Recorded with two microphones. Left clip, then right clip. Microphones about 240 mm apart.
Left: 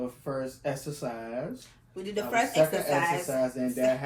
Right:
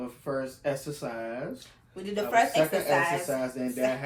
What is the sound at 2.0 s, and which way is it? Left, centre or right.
Speech, centre.